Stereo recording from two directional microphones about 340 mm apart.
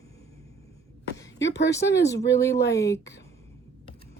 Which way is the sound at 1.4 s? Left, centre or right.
Left.